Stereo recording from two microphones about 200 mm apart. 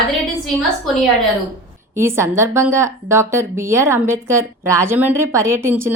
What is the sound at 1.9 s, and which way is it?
Speech, 10° right (ahead or behind).